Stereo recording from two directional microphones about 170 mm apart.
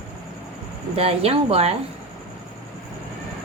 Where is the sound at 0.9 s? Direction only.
35° right (ahead or behind).